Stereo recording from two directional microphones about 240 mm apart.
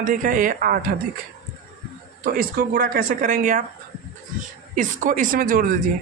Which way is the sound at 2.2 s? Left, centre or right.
Right.